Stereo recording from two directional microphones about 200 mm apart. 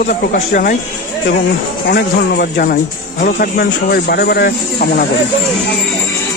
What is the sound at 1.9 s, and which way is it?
Speech, 50° left (ahead or behind).